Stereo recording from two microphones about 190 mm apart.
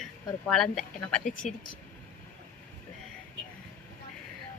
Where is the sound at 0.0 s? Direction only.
Centre (ahead or behind).